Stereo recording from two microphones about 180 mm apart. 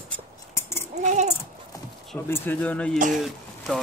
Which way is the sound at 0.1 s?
15° left (ahead or behind).